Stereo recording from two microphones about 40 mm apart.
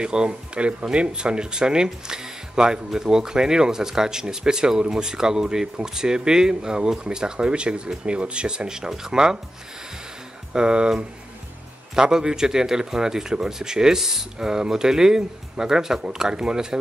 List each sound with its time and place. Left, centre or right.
0.0 s a man's voice: right
10.5 s a man's voice: right